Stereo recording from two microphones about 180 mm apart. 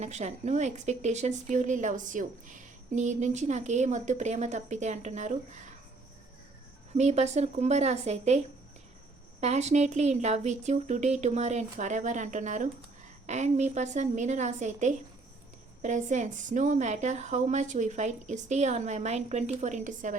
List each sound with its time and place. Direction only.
0.0 s a woman's voice: 40° right (ahead or behind)
6.9 s a woman's voice: 40° right (ahead or behind)
9.4 s a woman's voice: 40° right (ahead or behind)